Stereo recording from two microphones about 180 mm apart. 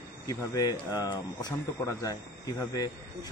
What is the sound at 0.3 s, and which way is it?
A man's voice, 20° left (ahead or behind).